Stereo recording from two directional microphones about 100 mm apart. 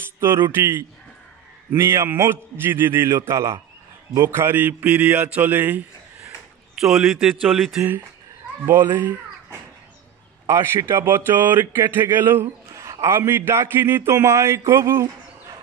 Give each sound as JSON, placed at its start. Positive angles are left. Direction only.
{"t": 0.2, "sound": "a man's voice", "side_deg": -25}
{"t": 6.7, "sound": "a man's voice", "side_deg": -5}
{"t": 8.6, "sound": "a man's voice", "side_deg": -20}
{"t": 10.4, "sound": "a man's voice", "side_deg": -30}
{"t": 12.7, "sound": "a man's voice", "side_deg": -30}